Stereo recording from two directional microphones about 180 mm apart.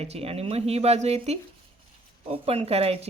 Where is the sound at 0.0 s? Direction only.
35° right (ahead or behind).